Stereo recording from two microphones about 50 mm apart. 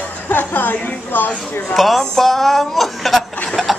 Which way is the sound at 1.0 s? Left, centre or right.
Left.